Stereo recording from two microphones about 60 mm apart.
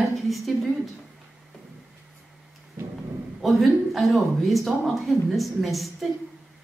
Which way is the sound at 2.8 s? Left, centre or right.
Right.